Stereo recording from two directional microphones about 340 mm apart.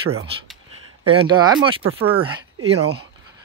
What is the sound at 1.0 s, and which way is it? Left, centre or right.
Speech, centre.